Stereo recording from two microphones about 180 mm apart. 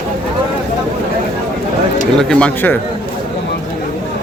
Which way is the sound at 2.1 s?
5° left (ahead or behind).